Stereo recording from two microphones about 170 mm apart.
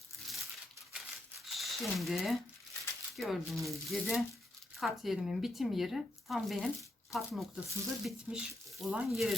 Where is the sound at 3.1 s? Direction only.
Centre (ahead or behind).